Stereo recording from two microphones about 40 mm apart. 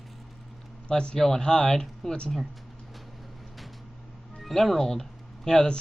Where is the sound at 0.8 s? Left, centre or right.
Centre.